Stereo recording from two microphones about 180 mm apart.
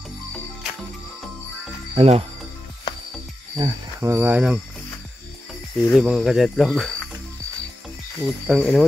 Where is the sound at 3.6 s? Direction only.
15° right (ahead or behind).